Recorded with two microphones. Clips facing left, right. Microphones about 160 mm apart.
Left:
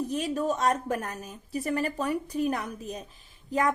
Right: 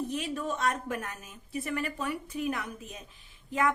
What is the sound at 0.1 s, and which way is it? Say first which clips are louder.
A woman's voice: left 5 dB; 40° left (ahead or behind).